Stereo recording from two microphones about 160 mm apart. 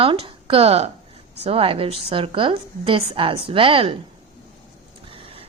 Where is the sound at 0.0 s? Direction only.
35° right (ahead or behind).